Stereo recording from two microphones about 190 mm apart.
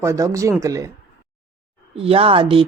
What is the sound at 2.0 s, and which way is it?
Speech, 30° right (ahead or behind).